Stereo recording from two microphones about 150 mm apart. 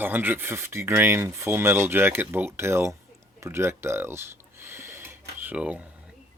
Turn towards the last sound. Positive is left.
turn(degrees=-10)  # may be behind; listen again after turning